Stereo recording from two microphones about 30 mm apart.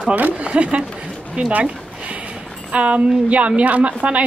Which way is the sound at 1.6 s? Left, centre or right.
Right.